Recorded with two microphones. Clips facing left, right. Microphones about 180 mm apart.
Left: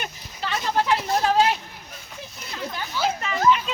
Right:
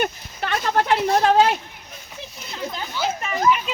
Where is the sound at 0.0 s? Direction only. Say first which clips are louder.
Right 7 dB; 55° right (ahead or behind).